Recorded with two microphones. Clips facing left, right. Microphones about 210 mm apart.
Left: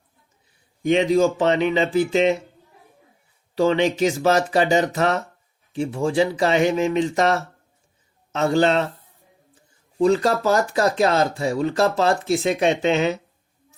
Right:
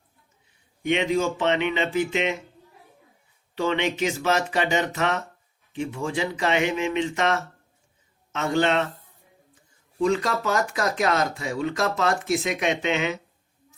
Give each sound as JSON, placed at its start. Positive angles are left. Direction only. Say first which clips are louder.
{"t": 0.8, "sound": "speech", "louder": "left 6 dB", "side_deg": 35}
{"t": 3.5, "sound": "speech", "louder": "left 6 dB", "side_deg": 35}
{"t": 10.0, "sound": "speech", "louder": "left 5 dB", "side_deg": 35}